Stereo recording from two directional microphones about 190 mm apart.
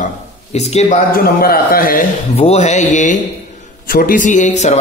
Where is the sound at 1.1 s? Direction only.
50° left (ahead or behind).